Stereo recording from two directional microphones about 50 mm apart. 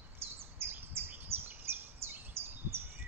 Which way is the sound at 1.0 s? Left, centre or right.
Right.